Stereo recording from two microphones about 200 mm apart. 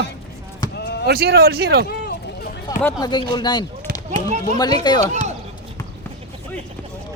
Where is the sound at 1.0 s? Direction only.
55° right (ahead or behind).